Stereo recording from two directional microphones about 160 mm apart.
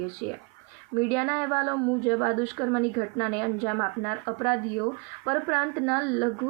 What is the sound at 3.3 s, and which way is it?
A woman's voice, 5° left (ahead or behind).